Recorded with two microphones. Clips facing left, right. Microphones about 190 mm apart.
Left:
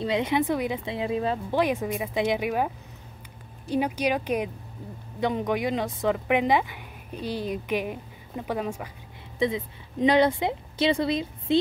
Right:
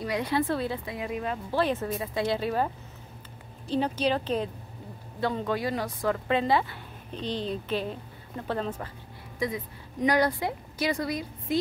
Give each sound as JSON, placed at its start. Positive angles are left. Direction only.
{"t": 0.0, "sound": "speech", "side_deg": 20}
{"t": 1.5, "sound": "speech", "side_deg": 15}
{"t": 9.4, "sound": "a woman's voice", "side_deg": 25}